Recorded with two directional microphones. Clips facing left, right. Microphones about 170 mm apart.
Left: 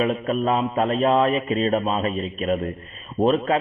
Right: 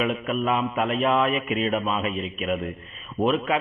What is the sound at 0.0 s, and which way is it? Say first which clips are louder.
A man's voice: left 3 dB; 35° left (ahead or behind).